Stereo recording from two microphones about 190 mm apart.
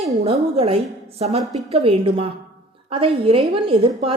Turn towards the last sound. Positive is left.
turn(degrees=-30)  # may be behind; listen again after turning